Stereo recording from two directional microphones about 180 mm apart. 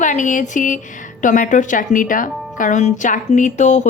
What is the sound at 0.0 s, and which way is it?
A woman's voice, 45° left (ahead or behind).